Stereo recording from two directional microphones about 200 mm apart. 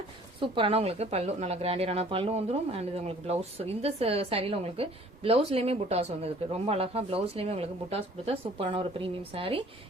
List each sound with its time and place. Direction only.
0.3 s speech: 25° right (ahead or behind)